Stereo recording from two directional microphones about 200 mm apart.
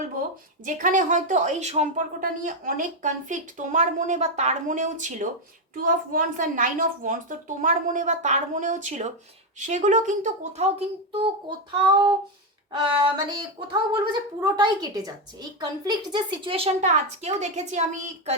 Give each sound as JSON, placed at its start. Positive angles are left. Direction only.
{"t": 0.6, "sound": "a woman's voice", "side_deg": -40}